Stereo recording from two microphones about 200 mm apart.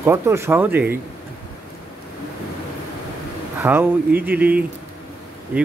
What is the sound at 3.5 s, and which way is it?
Speech, 10° right (ahead or behind).